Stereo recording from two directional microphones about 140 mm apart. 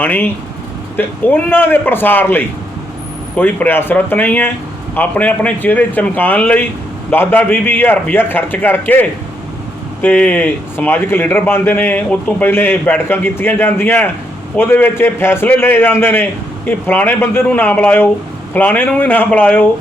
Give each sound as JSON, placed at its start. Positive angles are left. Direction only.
{"t": 0.0, "sound": "speech", "side_deg": 10}